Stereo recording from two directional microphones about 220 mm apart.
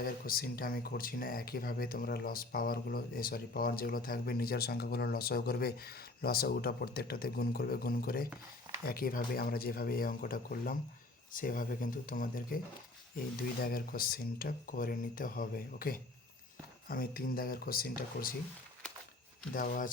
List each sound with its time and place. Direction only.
0.0 s speech: 40° left (ahead or behind)
13.6 s speech: 40° left (ahead or behind)
19.5 s speech: 40° left (ahead or behind)